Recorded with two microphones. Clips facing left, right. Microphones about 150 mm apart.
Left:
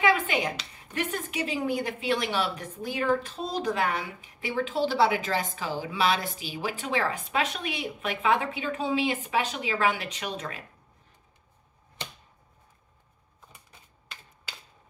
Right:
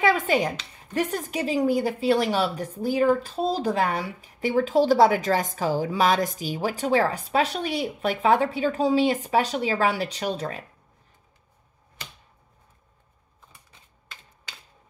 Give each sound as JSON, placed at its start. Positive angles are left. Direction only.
{"t": 0.0, "sound": "a woman's voice", "side_deg": -40}